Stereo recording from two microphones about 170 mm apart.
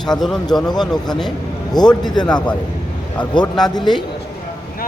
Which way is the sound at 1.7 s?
25° left (ahead or behind).